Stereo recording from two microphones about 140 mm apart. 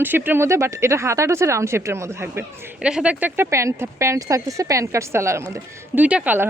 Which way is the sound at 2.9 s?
5° right (ahead or behind).